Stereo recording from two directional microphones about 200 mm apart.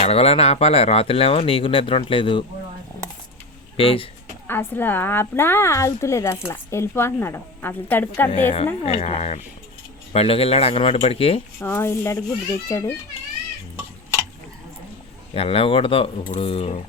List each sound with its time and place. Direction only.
0.0 s speech: 30° left (ahead or behind)
3.8 s speech: 25° left (ahead or behind)
4.4 s speech: 10° left (ahead or behind)
8.3 s speech: 35° left (ahead or behind)
11.6 s speech: 10° left (ahead or behind)
15.3 s speech: 30° left (ahead or behind)